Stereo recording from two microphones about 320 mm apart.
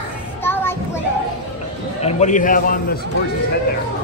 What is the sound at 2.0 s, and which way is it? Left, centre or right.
A man's voice, left.